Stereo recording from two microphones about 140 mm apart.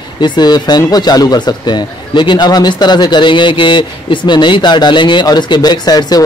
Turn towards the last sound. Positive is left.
turn(degrees=30)  # may be behind; listen again after turning